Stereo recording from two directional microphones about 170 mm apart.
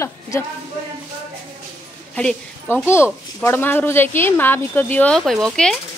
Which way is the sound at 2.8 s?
15° left (ahead or behind).